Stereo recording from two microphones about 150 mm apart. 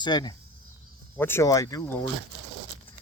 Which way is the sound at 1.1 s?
15° left (ahead or behind).